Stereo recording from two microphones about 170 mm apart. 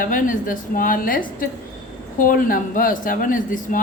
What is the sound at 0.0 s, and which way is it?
A woman's voice, 55° left (ahead or behind).